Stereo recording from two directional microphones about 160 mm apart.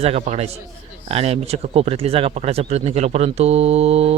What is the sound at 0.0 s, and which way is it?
Speech, 40° right (ahead or behind).